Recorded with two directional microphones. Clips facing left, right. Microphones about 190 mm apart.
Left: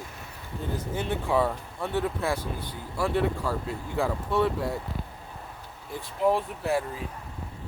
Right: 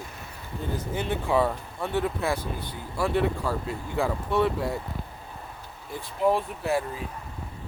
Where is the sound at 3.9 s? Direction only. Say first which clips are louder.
Right 1 dB; 15° right (ahead or behind).